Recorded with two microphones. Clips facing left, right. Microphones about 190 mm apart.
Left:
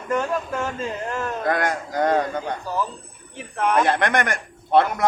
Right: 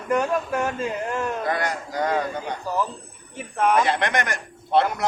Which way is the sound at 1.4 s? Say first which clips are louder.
Left 3 dB; 50° left (ahead or behind).